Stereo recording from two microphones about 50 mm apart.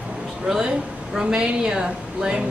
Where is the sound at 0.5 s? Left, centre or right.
Centre.